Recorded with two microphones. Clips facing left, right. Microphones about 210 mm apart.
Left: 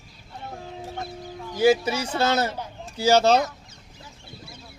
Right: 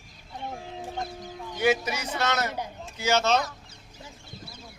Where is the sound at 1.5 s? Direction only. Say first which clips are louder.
Left 6 dB; 30° left (ahead or behind).